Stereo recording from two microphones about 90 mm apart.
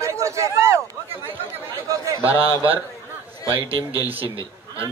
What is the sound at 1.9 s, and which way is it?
Chatter, 35° right (ahead or behind).